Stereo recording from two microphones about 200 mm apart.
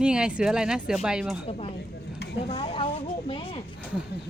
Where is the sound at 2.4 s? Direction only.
30° left (ahead or behind).